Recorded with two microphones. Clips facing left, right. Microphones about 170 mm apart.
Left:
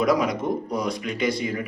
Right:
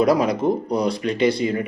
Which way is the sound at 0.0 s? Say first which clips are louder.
Right 4 dB; 30° right (ahead or behind).